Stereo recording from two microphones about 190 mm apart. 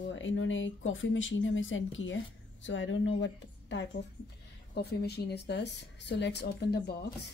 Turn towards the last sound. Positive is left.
turn(degrees=60)  # may be behind; listen again after turning